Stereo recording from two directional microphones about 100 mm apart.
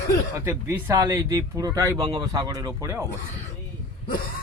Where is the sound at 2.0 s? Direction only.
50° right (ahead or behind).